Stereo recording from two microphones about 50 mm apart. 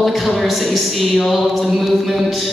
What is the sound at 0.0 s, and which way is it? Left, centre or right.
A woman's voice, centre.